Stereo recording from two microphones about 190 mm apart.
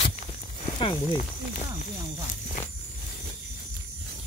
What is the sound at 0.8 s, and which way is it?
Speech, 20° left (ahead or behind).